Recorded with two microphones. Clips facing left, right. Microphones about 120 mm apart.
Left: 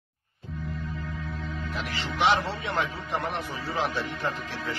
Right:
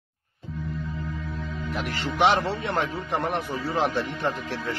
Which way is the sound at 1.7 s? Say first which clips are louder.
Right 5 dB; 50° right (ahead or behind).